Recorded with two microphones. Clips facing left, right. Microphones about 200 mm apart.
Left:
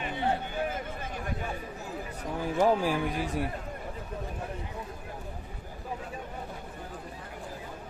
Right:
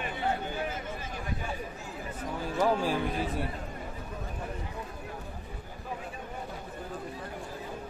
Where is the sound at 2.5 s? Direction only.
10° left (ahead or behind).